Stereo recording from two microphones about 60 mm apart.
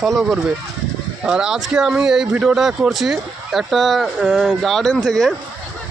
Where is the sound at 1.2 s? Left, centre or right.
Centre.